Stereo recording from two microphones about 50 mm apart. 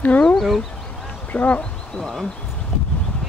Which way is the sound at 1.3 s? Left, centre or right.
Left.